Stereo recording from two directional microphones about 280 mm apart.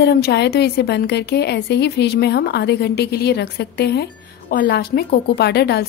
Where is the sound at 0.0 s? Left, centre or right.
Left.